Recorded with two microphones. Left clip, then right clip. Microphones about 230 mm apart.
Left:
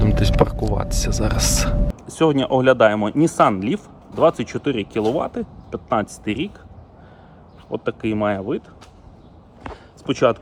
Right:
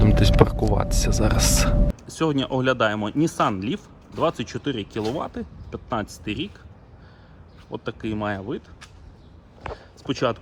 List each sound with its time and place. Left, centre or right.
0.0 s speech: centre
2.1 s speech: left
3.5 s speech: centre
4.2 s speech: left
7.7 s speech: left
10.1 s speech: left